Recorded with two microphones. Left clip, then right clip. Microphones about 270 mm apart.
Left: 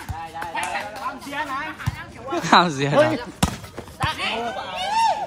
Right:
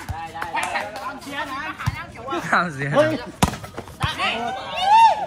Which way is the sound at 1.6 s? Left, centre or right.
Centre.